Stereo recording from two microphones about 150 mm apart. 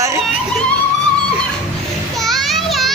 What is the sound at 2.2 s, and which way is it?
Children playing, centre (ahead or behind).